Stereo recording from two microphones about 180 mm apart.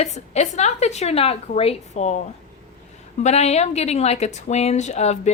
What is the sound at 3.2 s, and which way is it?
Speech, 35° left (ahead or behind).